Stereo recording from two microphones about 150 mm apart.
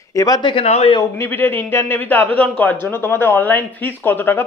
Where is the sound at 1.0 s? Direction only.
15° left (ahead or behind).